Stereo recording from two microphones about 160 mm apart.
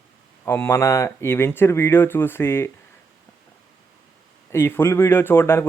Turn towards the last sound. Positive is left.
turn(degrees=15)  # may be behind; listen again after turning